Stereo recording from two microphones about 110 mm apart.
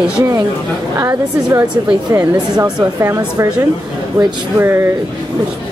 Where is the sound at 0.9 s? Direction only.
25° right (ahead or behind).